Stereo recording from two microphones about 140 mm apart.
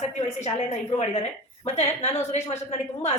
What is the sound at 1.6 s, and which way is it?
Speech, 50° left (ahead or behind).